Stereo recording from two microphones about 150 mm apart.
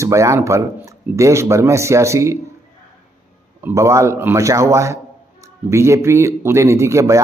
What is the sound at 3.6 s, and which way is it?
Speech, 20° right (ahead or behind).